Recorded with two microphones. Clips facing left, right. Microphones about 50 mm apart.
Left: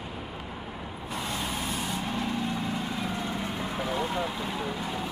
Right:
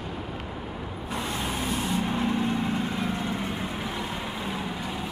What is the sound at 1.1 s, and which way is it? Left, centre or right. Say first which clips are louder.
Vehicle: right 2 dB; centre.